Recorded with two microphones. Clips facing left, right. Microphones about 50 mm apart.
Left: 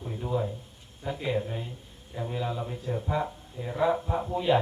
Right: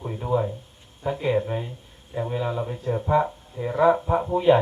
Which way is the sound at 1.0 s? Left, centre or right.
Right.